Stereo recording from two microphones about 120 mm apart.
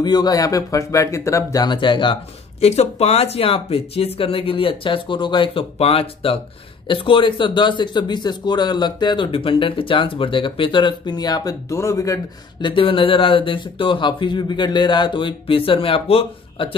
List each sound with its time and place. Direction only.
0.0 s speech: 35° left (ahead or behind)
2.6 s speech: 60° left (ahead or behind); by 12.2 s 25° left (ahead or behind)
12.6 s speech: 45° left (ahead or behind)